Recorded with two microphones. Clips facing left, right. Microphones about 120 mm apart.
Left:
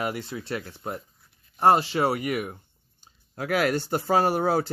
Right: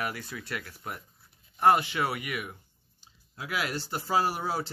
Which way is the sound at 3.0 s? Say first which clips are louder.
Left 9 dB; 50° left (ahead or behind).